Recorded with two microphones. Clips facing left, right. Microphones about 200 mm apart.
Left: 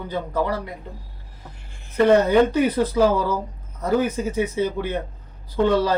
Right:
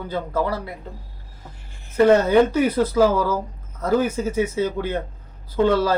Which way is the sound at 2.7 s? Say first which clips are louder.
Right 1 dB; 15° left (ahead or behind).